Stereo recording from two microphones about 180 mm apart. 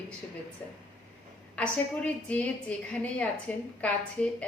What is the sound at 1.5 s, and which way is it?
A woman's voice, 5° left (ahead or behind).